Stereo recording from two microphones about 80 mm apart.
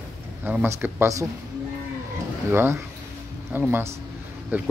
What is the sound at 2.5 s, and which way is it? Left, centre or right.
Speech, right.